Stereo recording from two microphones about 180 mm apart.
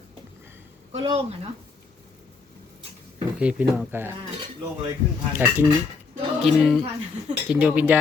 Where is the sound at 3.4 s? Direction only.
5° right (ahead or behind).